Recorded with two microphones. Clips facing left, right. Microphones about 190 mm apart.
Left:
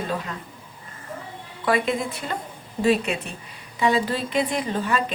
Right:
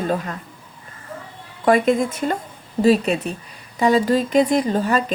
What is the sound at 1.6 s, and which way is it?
A woman's voice, 45° right (ahead or behind).